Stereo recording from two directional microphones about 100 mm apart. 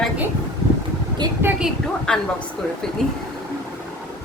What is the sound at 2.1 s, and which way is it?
Speech, 10° left (ahead or behind).